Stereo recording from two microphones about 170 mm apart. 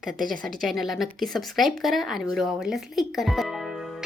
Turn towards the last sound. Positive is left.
turn(degrees=0)  # may be behind; listen again after turning